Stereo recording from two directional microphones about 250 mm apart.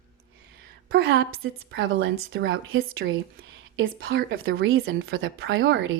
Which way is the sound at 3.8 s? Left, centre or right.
Right.